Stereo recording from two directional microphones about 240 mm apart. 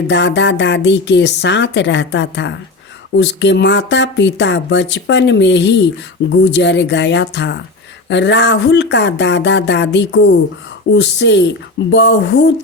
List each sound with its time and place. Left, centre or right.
0.1 s speech: left